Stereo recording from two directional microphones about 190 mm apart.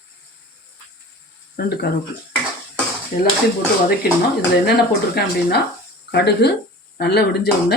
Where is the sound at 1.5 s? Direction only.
55° left (ahead or behind).